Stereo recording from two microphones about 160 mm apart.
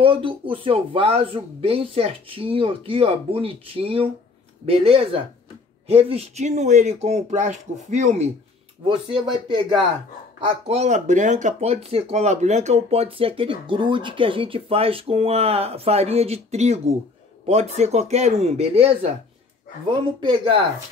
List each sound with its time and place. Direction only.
0.0 s speech: 30° right (ahead or behind)
8.8 s speech: 30° right (ahead or behind)
10.4 s speech: 40° right (ahead or behind)